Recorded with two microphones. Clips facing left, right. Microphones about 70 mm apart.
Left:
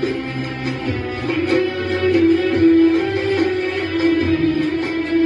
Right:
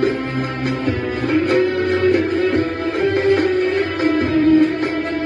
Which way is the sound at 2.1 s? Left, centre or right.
Right.